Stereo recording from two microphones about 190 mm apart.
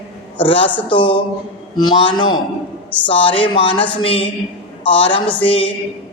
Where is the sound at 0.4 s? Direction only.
25° left (ahead or behind).